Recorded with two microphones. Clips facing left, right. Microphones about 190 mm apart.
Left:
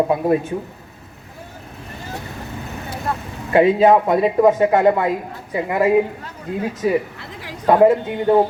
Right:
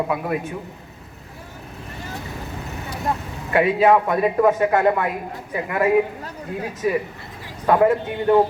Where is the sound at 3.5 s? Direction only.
30° left (ahead or behind).